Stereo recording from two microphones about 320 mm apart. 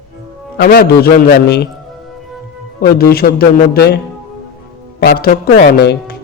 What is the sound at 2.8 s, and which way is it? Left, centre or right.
A man's voice, left.